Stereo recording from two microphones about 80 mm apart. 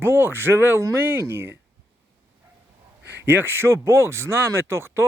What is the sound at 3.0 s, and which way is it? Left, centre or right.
Speech, right.